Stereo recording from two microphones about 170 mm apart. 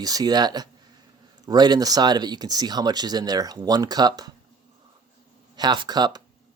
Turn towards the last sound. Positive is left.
turn(degrees=-25)  # may be behind; listen again after turning